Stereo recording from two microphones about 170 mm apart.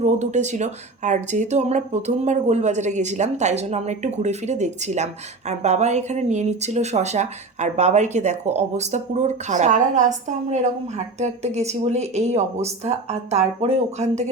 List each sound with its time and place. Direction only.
0.0 s speech: 45° right (ahead or behind)